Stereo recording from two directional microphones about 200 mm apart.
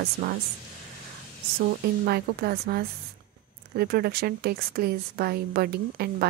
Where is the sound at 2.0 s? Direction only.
50° right (ahead or behind).